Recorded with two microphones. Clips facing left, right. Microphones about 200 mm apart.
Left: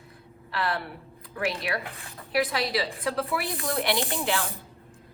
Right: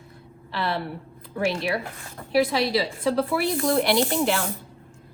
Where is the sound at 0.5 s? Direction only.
25° right (ahead or behind).